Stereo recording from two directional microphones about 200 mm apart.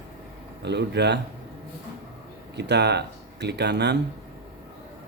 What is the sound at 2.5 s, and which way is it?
Speech, 60° right (ahead or behind).